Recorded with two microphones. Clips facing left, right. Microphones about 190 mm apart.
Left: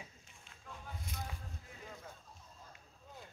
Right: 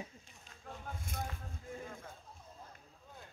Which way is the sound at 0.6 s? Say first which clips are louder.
Right 3 dB; 50° right (ahead or behind).